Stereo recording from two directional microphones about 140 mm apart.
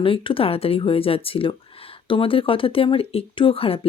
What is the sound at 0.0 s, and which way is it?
Speech, 40° left (ahead or behind).